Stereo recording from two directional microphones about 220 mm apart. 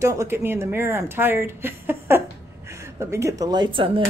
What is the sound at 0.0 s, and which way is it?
Speech, 15° right (ahead or behind).